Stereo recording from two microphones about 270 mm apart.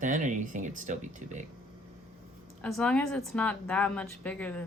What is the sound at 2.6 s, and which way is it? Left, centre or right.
A woman's voice, centre.